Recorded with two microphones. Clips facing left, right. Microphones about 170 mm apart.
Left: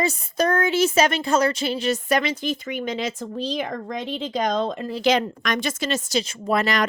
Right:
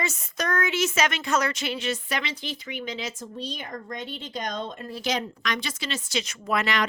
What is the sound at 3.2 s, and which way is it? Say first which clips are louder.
Speech: left 9 dB; 90° left.